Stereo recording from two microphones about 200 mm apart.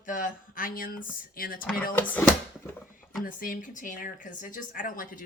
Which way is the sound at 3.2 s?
45° left (ahead or behind).